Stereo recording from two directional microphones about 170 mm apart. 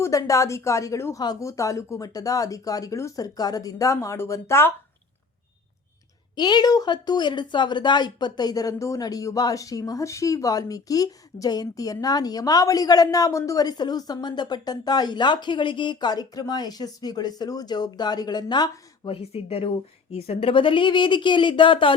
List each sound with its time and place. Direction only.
0.0 s speech: 20° left (ahead or behind)
6.3 s speech: 25° left (ahead or behind)